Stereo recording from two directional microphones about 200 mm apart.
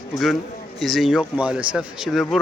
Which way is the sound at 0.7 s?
Centre (ahead or behind).